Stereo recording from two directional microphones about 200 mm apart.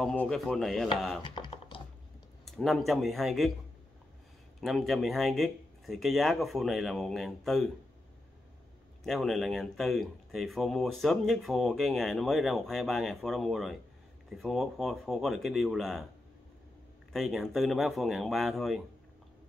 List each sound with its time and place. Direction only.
0.0 s speech: 5° left (ahead or behind)
1.2 s computer keyboard: 25° left (ahead or behind)
2.4 s speech: centre (ahead or behind)
4.6 s speech: centre (ahead or behind)
9.0 s speech: centre (ahead or behind)
17.1 s speech: centre (ahead or behind)